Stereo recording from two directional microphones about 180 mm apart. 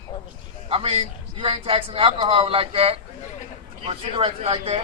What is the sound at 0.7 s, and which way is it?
Speech, 35° right (ahead or behind).